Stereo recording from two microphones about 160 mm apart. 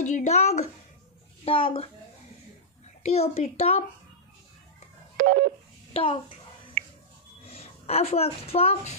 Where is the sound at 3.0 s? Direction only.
40° left (ahead or behind).